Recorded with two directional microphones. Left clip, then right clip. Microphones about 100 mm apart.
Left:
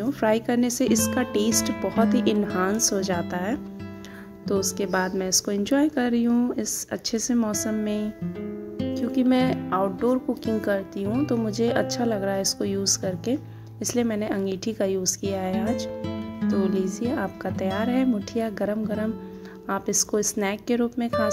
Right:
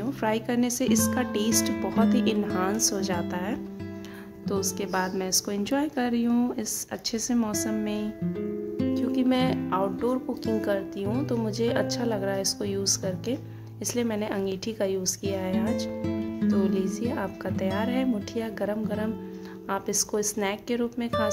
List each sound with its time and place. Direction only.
0.0 s a woman's voice: 50° left (ahead or behind)
1.7 s speech: centre (ahead or behind)
2.0 s a woman's voice: 45° left (ahead or behind)
6.2 s a woman's voice: 30° left (ahead or behind)
6.5 s a woman's voice: 45° left (ahead or behind)
8.4 s music: centre (ahead or behind)
8.9 s music: 40° left (ahead or behind)
9.7 s a woman's voice: 45° left (ahead or behind)
16.0 s music: centre (ahead or behind)
16.5 s a woman's voice: 40° left (ahead or behind)